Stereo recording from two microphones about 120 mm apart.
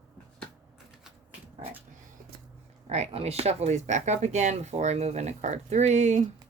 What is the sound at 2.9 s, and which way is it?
Speech, 60° right (ahead or behind).